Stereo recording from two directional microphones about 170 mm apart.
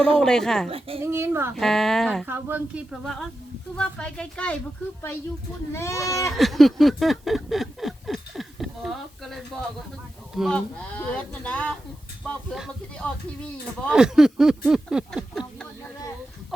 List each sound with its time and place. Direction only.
0.2 s speech: 5° left (ahead or behind)
1.0 s a woman's voice: 15° right (ahead or behind)
1.5 s speech: centre (ahead or behind)
2.2 s a woman's voice: 10° right (ahead or behind); by 4.5 s 5° left (ahead or behind)
5.7 s speech: 15° left (ahead or behind)
6.3 s a sound: centre (ahead or behind)
10.3 s speech: centre (ahead or behind)